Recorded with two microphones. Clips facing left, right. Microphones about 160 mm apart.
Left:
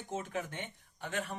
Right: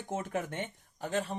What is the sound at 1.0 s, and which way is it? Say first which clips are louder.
Speech: right 5 dB; 35° right (ahead or behind).